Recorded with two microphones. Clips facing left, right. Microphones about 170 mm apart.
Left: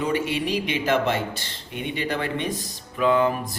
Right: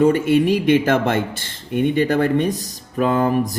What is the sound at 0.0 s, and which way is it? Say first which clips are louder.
Speech: right 10 dB; 45° right (ahead or behind).